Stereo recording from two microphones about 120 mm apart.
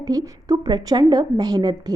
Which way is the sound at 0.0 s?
30° right (ahead or behind).